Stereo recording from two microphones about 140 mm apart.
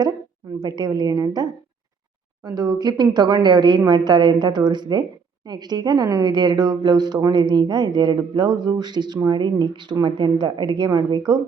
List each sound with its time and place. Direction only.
0.6 s a woman's voice: 30° right (ahead or behind)